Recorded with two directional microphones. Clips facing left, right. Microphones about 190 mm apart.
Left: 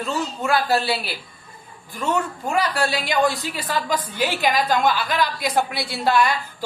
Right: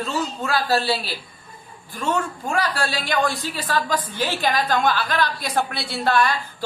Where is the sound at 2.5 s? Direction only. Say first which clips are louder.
Left 2 dB; 15° left (ahead or behind).